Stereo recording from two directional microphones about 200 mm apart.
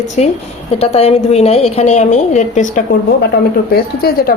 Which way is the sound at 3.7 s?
50° left (ahead or behind).